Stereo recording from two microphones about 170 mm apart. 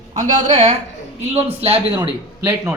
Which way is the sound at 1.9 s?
15° right (ahead or behind).